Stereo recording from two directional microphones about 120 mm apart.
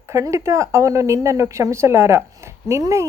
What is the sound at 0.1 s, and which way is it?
A woman's voice, 25° right (ahead or behind).